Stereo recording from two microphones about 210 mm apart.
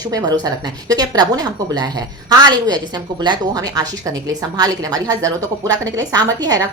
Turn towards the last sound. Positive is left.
turn(degrees=-20)  # may be behind; listen again after turning